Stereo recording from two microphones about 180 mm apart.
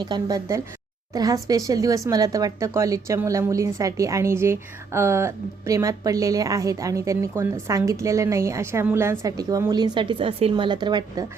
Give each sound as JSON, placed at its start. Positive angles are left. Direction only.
{"t": 0.0, "sound": "speech", "side_deg": -20}